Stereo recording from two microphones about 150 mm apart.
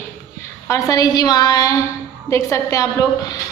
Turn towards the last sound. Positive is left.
turn(degrees=20)  # may be behind; listen again after turning